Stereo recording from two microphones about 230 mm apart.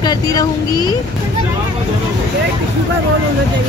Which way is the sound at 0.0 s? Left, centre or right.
Centre.